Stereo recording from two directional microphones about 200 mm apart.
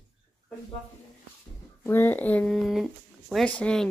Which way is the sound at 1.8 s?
10° left (ahead or behind).